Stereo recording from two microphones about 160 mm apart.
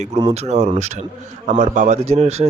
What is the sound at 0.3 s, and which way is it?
Speech, 45° right (ahead or behind).